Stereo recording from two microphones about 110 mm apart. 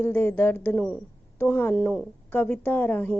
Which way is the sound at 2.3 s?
20° left (ahead or behind).